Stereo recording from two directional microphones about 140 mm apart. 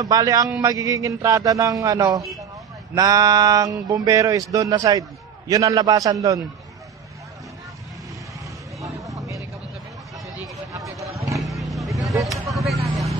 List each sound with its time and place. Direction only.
0.0 s speech: 25° right (ahead or behind)
9.1 s a sound: 20° right (ahead or behind)
11.3 s vehicle: centre (ahead or behind)